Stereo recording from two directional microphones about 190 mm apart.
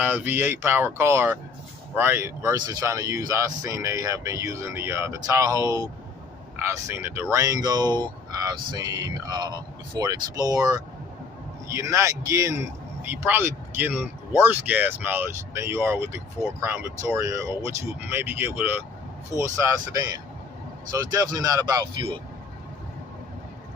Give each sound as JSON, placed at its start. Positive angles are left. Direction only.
{"t": 0.0, "sound": "speech", "side_deg": -10}